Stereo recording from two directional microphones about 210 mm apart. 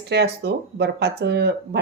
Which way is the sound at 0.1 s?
50° right (ahead or behind).